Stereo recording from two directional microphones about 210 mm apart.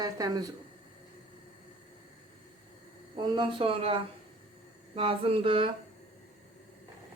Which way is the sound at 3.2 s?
20° right (ahead or behind).